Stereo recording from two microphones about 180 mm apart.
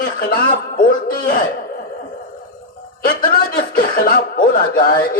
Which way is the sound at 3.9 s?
50° left (ahead or behind).